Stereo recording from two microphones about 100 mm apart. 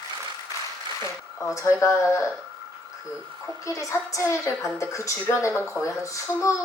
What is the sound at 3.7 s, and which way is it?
A woman's voice, 30° left (ahead or behind).